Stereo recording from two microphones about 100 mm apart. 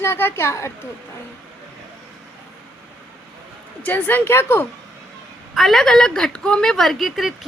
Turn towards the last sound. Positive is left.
turn(degrees=0)  # may be behind; listen again after turning